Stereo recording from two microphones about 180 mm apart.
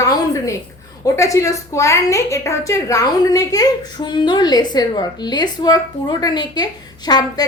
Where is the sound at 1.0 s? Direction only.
15° left (ahead or behind).